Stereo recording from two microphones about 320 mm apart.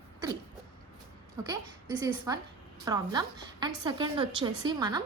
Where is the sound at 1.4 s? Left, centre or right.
Centre.